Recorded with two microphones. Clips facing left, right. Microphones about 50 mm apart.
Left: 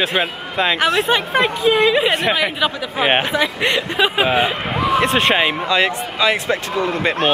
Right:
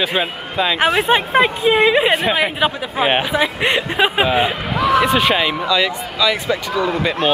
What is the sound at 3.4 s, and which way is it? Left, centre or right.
Speech, centre.